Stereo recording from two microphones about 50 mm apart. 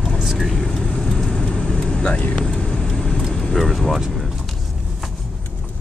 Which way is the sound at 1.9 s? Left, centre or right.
Left.